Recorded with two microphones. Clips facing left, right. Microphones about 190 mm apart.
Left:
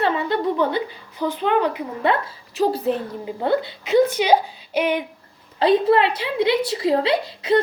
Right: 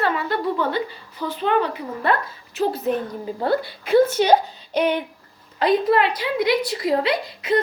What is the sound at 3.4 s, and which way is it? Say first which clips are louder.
A woman's voice: left 1 dB; 20° left (ahead or behind).